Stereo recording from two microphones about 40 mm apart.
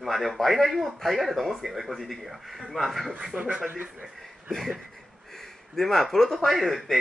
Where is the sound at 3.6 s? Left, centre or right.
Right.